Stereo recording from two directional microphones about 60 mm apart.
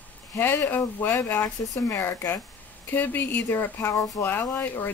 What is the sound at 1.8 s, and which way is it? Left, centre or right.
Speech, left.